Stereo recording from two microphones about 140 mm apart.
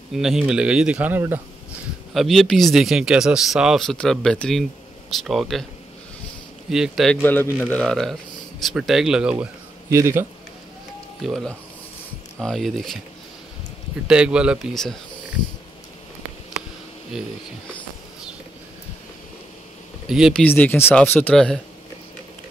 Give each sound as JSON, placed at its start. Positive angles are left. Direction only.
{"t": 0.1, "sound": "speech", "side_deg": 0}
{"t": 2.1, "sound": "speech", "side_deg": 0}
{"t": 6.7, "sound": "speech", "side_deg": 0}
{"t": 7.2, "sound": "speech", "side_deg": 15}
{"t": 9.8, "sound": "a man's voice", "side_deg": -20}
{"t": 11.2, "sound": "speech", "side_deg": 0}
{"t": 14.0, "sound": "speech", "side_deg": -5}
{"t": 20.1, "sound": "speech", "side_deg": -5}
{"t": 20.4, "sound": "speech", "side_deg": 10}